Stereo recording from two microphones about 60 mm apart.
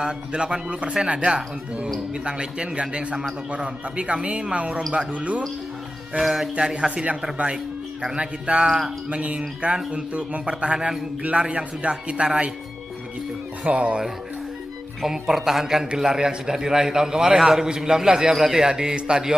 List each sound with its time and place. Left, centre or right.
0.0 s a man's voice: centre
6.2 s speech: centre
6.5 s a man's voice: centre
13.7 s a man's voice: right
15.0 s a man's voice: centre